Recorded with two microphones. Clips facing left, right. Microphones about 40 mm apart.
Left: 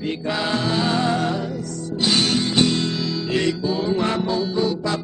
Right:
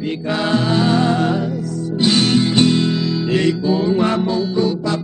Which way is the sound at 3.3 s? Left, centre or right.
Centre.